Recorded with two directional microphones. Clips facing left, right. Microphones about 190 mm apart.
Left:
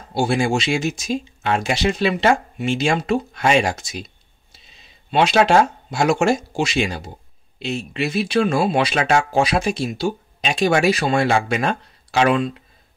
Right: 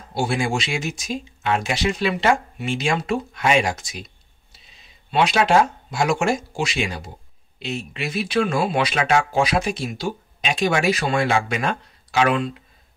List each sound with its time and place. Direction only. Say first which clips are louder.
0.1 s speech: left 4 dB; 30° left (ahead or behind)
5.1 s speech: left 2 dB; 30° left (ahead or behind)